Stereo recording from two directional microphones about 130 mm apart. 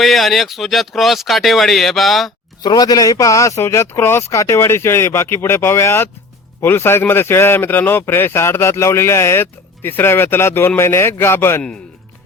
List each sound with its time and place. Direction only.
0.0 s speech: centre (ahead or behind)
2.6 s a man's voice: 30° left (ahead or behind)